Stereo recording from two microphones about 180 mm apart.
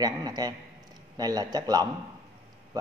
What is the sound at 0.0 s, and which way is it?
Speech, 20° right (ahead or behind).